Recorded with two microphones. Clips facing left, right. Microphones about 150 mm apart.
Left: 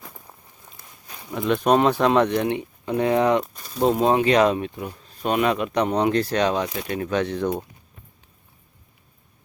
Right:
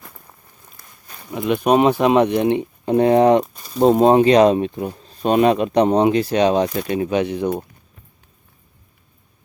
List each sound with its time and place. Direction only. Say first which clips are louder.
0.0 s walk: even; 5° left (ahead or behind)
0.8 s a sound: even; 5° left (ahead or behind)
1.3 s speech: right 2 dB; 10° right (ahead or behind); by 6.1 s 25° right (ahead or behind)
6.1 s speech: right 5 dB; 15° right (ahead or behind)